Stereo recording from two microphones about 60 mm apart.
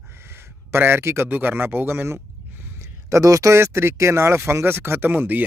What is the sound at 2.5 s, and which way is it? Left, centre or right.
Speech, right.